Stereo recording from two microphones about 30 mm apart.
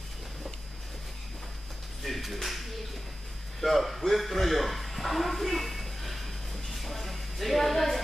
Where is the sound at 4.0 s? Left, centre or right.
Centre.